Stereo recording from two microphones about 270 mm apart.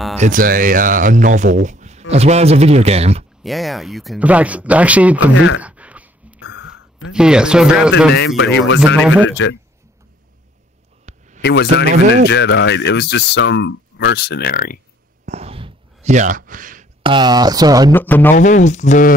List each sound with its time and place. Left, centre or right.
0.2 s speech: right
3.4 s speech: centre
5.6 s dog: centre
6.4 s a sound: left
7.1 s speech: centre
8.4 s speech: left
8.9 s speech: centre
9.3 s a man's voice: left
11.1 s a sound: right
11.4 s speech: left
15.2 s a sound: right
17.0 s speech: centre
17.9 s a man's voice: centre
18.3 s speech: left